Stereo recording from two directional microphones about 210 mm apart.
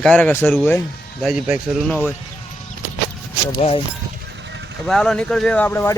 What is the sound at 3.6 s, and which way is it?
Speech, 35° left (ahead or behind).